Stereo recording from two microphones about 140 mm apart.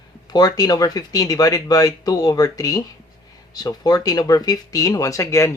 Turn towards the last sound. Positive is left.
turn(degrees=20)  # may be behind; listen again after turning